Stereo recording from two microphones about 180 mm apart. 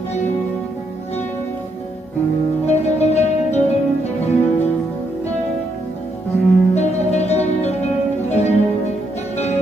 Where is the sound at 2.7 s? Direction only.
40° left (ahead or behind).